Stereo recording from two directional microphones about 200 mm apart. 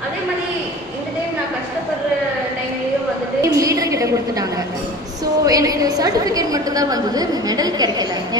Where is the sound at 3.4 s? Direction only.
15° right (ahead or behind).